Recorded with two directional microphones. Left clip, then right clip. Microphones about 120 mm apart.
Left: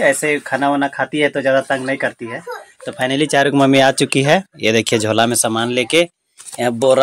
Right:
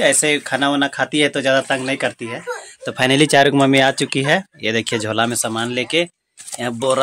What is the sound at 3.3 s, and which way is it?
Speech, 45° right (ahead or behind).